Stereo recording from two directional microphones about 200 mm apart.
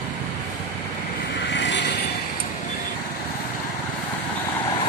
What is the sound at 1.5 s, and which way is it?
Vehicle, 60° left (ahead or behind).